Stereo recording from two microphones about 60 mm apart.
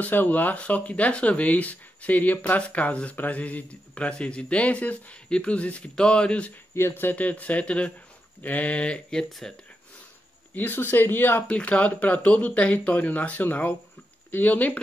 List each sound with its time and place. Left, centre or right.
0.0 s speech: left
6.7 s speech: left; by 9.6 s centre
10.5 s speech: left
11.4 s speech: left